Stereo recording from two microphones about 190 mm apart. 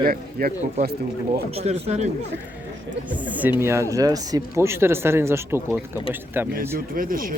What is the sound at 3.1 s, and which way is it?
Speech, 10° right (ahead or behind).